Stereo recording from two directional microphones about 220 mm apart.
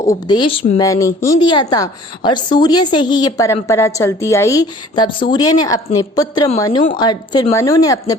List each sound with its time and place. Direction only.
0.1 s a woman's voice: 20° left (ahead or behind)